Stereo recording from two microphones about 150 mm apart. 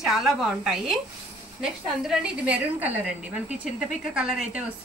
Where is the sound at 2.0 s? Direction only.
5° right (ahead or behind).